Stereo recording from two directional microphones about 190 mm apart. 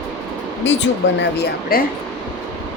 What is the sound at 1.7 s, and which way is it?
Speech, 50° left (ahead or behind).